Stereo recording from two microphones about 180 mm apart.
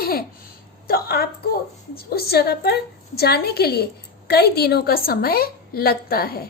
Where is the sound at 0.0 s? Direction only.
55° left (ahead or behind).